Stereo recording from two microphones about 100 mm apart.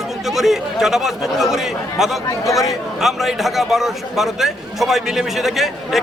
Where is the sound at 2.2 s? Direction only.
35° left (ahead or behind).